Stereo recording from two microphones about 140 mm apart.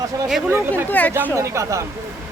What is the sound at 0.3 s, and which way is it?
Speech, 5° right (ahead or behind).